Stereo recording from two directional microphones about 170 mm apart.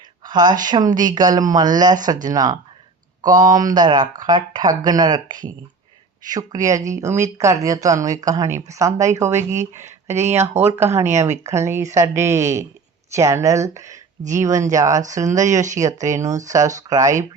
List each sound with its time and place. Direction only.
0.3 s speech: 25° right (ahead or behind)